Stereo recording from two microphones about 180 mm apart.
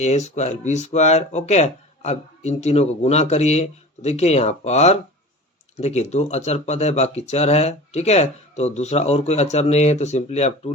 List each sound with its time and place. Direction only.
0.0 s speech: 40° left (ahead or behind)